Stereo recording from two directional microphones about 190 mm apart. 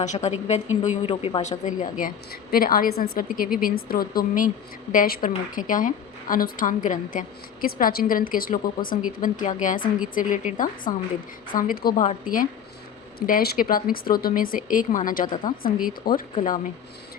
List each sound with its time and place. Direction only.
0.0 s a woman's voice: 40° left (ahead or behind)
13.1 s a woman's voice: 50° left (ahead or behind)